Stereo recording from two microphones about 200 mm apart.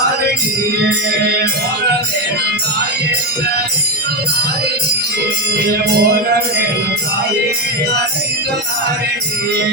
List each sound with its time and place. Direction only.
5.5 s music: 50° right (ahead or behind)